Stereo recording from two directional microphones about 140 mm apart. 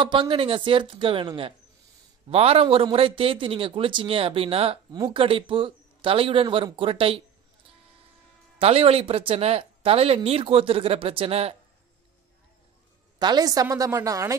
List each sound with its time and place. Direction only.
0.0 s speech: 35° right (ahead or behind)
8.5 s speech: 45° right (ahead or behind)
13.2 s a woman's voice: 30° right (ahead or behind)